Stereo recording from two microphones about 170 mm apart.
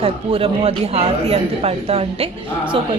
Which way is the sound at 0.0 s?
35° right (ahead or behind).